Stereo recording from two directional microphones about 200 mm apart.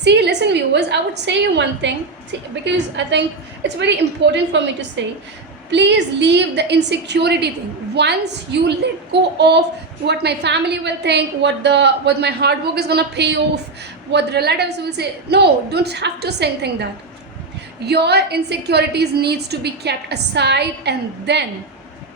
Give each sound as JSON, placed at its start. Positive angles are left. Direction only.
{"t": 0.0, "sound": "a woman's voice", "side_deg": -60}
{"t": 17.8, "sound": "a woman's voice", "side_deg": -55}